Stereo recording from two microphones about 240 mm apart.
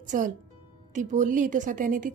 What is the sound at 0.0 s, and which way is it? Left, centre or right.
Speech, right.